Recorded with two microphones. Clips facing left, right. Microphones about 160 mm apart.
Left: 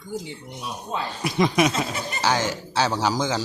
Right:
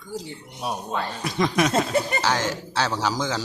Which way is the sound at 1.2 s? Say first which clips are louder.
Left 3 dB; 10° left (ahead or behind).